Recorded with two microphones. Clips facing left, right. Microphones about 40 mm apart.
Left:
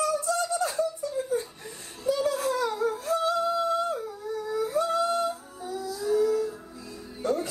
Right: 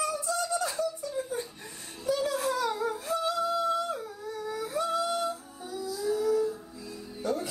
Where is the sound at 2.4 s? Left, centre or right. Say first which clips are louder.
Left 2 dB; left.